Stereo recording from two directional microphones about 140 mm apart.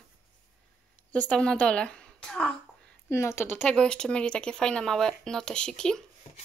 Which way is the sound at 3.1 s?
20° left (ahead or behind).